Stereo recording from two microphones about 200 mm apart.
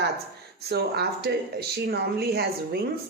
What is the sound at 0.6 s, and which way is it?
Speech, 55° right (ahead or behind).